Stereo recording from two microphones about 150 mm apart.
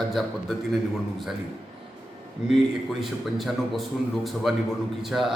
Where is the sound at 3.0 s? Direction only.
Centre (ahead or behind).